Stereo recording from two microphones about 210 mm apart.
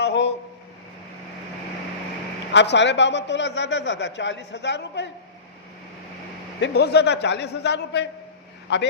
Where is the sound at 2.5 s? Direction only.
55° left (ahead or behind).